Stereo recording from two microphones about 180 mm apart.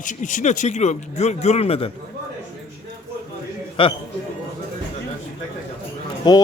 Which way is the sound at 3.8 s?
30° left (ahead or behind).